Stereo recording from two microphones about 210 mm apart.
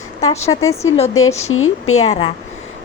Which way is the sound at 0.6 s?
15° left (ahead or behind).